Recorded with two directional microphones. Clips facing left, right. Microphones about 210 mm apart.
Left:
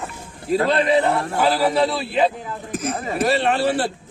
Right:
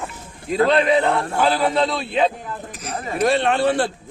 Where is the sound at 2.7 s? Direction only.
50° left (ahead or behind).